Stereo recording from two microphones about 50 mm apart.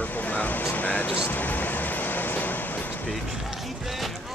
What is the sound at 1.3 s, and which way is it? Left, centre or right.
Vehicle, left.